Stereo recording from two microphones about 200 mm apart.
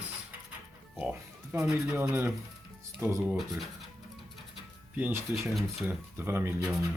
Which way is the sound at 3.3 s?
Centre (ahead or behind).